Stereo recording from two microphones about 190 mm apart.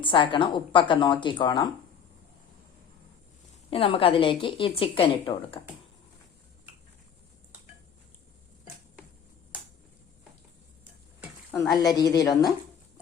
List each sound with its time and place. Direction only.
0.0 s a woman's voice: 25° left (ahead or behind)
3.7 s a woman's voice: 30° left (ahead or behind)
11.5 s a woman's voice: 15° left (ahead or behind)